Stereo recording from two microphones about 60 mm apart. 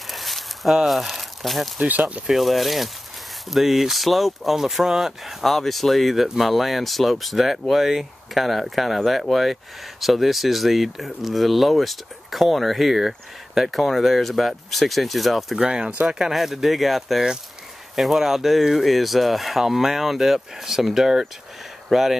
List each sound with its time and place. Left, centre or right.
0.1 s a sound: centre
1.9 s speech: right
2.2 s speech: centre
15.6 s speech: centre